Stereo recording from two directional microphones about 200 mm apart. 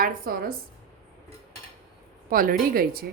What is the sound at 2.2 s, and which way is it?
Speech, 45° right (ahead or behind).